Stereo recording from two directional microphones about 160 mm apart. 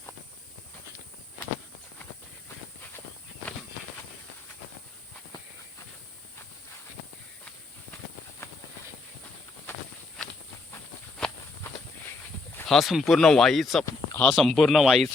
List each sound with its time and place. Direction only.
12.6 s speech: centre (ahead or behind)